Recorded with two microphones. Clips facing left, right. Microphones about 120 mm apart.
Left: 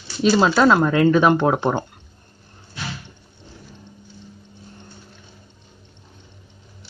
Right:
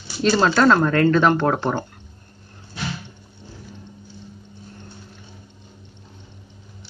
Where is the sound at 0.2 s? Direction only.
5° left (ahead or behind).